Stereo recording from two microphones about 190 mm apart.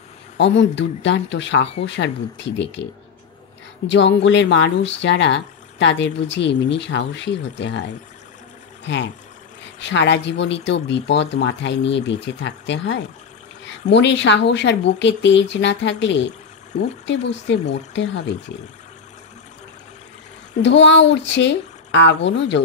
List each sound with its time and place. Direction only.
0.4 s speech: 70° left (ahead or behind)
3.8 s speech: 70° left (ahead or behind)
8.8 s speech: 70° left (ahead or behind)
20.6 s speech: 70° left (ahead or behind)